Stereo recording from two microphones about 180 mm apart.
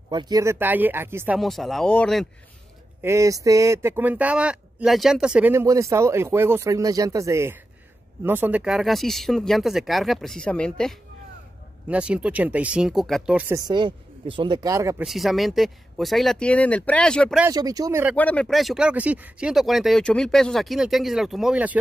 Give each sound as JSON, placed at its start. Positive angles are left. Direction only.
{"t": 0.1, "sound": "a man's voice", "side_deg": -20}
{"t": 1.4, "sound": "speech", "side_deg": 0}
{"t": 3.0, "sound": "a man's voice", "side_deg": -15}
{"t": 11.9, "sound": "a man's voice", "side_deg": -5}
{"t": 13.6, "sound": "speech", "side_deg": -25}
{"t": 15.0, "sound": "speech", "side_deg": 0}
{"t": 17.5, "sound": "speech", "side_deg": -20}
{"t": 18.1, "sound": "speech", "side_deg": 5}